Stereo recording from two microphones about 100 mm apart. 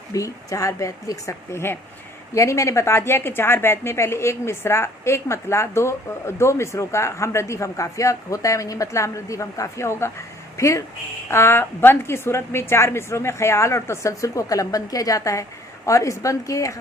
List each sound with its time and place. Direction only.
0.1 s a woman's voice: 35° left (ahead or behind)